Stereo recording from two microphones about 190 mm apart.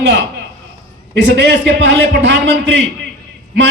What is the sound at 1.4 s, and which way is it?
Speech, 75° right (ahead or behind).